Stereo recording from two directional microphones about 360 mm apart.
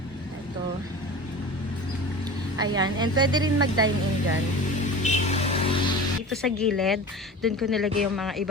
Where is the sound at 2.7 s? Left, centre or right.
Centre.